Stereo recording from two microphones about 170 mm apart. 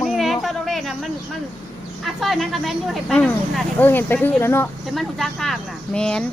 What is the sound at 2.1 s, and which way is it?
Speech, centre (ahead or behind).